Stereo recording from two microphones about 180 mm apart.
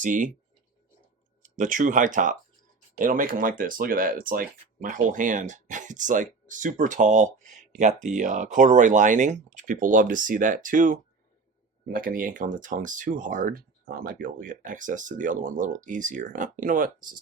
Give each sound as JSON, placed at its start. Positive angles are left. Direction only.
{"t": 0.0, "sound": "speech", "side_deg": -45}
{"t": 1.4, "sound": "speech", "side_deg": -45}